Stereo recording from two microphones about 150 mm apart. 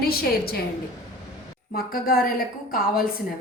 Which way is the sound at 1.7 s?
85° left.